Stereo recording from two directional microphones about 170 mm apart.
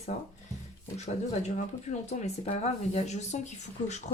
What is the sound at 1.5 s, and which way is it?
Speech, 45° left (ahead or behind).